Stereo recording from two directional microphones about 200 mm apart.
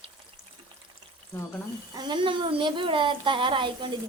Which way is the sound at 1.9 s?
25° right (ahead or behind).